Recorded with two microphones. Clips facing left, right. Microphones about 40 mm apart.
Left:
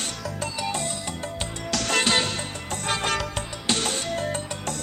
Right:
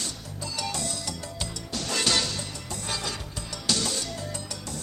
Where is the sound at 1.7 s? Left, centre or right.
Left.